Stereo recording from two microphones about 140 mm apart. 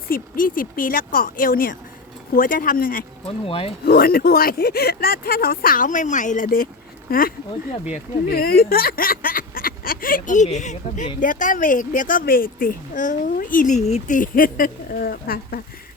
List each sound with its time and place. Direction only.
0.1 s speech: 85° left
3.4 s speech: 40° left (ahead or behind)
3.8 s speech: 90° left
7.1 s speech: 90° left; by 14.2 s 50° left (ahead or behind)
14.2 s speech: 90° left